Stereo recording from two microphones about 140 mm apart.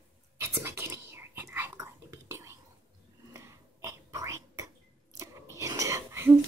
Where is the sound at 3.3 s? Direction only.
20° right (ahead or behind).